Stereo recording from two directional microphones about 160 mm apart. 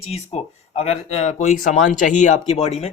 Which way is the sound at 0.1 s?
40° left (ahead or behind).